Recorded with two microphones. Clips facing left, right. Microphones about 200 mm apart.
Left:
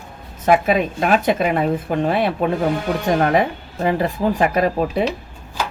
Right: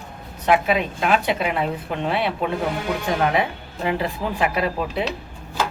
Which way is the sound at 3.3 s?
45° left (ahead or behind).